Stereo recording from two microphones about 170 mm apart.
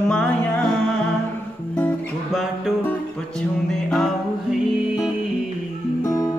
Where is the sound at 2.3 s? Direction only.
Centre (ahead or behind).